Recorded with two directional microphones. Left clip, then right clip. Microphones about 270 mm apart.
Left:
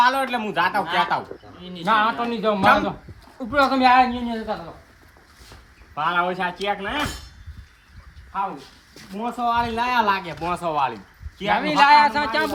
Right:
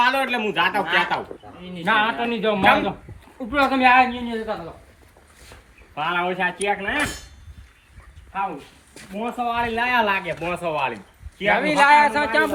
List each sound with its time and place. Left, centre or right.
0.0 s a woman's voice: left
5.5 s a sound: left
6.6 s speech: centre
9.1 s speech: left
11.5 s a woman's voice: left